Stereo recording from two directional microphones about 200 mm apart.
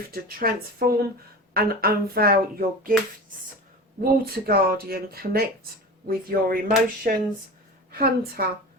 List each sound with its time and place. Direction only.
0.1 s speech: 50° right (ahead or behind)
4.0 s speech: 50° right (ahead or behind)